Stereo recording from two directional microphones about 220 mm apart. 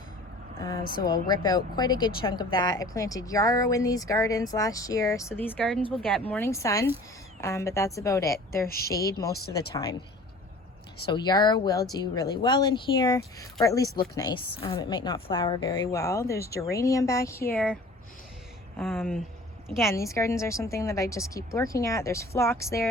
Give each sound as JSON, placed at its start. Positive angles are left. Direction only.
{"t": 1.0, "sound": "speech", "side_deg": 20}
{"t": 8.6, "sound": "speech", "side_deg": 40}
{"t": 9.5, "sound": "speech", "side_deg": 15}
{"t": 11.0, "sound": "speech", "side_deg": 20}
{"t": 18.8, "sound": "speech", "side_deg": 0}
{"t": 19.9, "sound": "speech", "side_deg": 15}